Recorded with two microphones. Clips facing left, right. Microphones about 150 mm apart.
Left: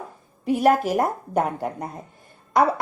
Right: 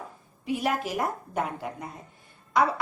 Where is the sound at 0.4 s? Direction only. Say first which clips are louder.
Left 9 dB; 45° left (ahead or behind).